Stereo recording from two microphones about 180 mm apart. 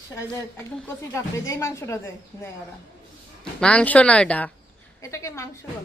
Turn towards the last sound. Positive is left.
turn(degrees=15)  # may be behind; listen again after turning